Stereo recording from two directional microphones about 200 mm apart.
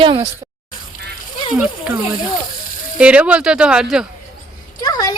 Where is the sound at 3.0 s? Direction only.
5° right (ahead or behind).